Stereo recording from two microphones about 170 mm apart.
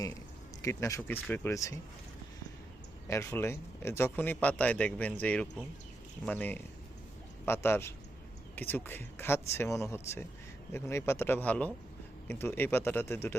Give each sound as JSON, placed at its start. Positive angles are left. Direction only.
{"t": 0.6, "sound": "speech", "side_deg": 15}
{"t": 3.1, "sound": "speech", "side_deg": 15}